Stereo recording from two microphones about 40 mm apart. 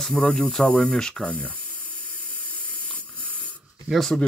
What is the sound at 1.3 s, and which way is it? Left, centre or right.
Speech, left.